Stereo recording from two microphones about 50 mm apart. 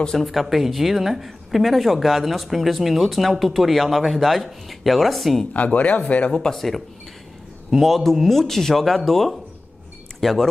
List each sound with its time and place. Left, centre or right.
0.0 s speech: centre
0.3 s speech: centre
5.5 s speech: left
6.3 s speech: centre